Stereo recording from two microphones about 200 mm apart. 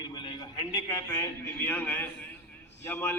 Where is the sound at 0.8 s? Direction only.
15° left (ahead or behind).